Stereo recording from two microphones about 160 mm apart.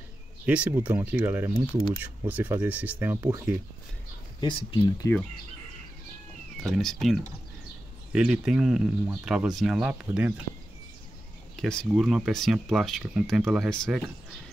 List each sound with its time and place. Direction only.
0.5 s speech: 10° right (ahead or behind)
4.4 s speech: 30° left (ahead or behind)
6.6 s speech: centre (ahead or behind)
11.5 s speech: 5° left (ahead or behind)